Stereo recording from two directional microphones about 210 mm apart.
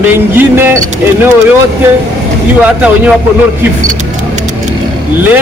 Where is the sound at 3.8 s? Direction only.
35° right (ahead or behind).